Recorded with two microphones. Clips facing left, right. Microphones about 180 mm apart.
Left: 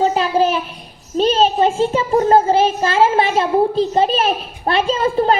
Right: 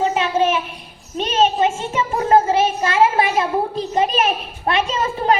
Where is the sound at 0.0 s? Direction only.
35° left (ahead or behind).